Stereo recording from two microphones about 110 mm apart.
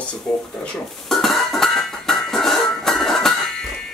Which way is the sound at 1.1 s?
Centre (ahead or behind).